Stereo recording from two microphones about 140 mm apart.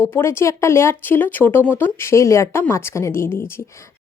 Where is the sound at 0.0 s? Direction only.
20° left (ahead or behind).